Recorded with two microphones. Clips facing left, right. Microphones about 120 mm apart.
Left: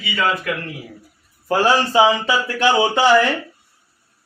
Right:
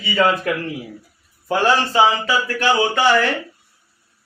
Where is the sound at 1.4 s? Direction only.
5° left (ahead or behind).